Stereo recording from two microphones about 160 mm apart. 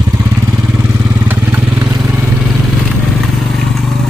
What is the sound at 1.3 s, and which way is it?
Vehicle, 10° right (ahead or behind).